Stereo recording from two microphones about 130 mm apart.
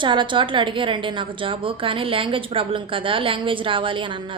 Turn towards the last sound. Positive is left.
turn(degrees=-40)  # may be behind; listen again after turning